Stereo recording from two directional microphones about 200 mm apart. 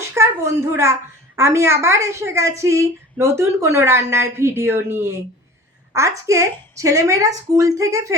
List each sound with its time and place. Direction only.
0.1 s a woman's voice: 10° right (ahead or behind)